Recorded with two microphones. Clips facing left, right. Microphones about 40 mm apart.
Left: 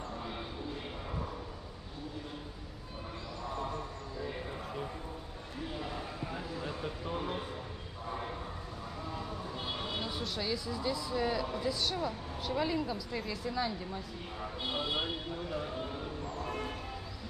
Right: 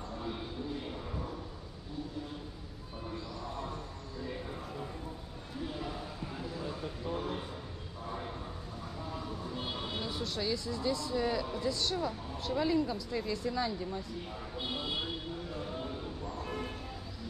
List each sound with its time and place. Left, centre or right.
6.3 s a sound: left
9.9 s speech: centre
14.8 s speech: left